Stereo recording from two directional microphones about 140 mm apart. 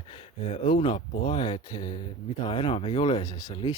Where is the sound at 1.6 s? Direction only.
30° left (ahead or behind).